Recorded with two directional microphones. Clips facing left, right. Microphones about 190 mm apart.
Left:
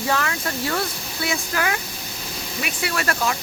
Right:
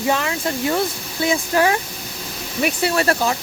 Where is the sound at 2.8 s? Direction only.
30° right (ahead or behind).